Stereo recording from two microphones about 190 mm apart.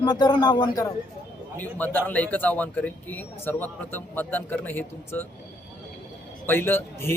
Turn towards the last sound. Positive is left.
turn(degrees=10)  # may be behind; listen again after turning